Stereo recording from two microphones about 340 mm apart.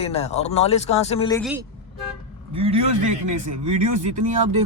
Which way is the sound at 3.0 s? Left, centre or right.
Right.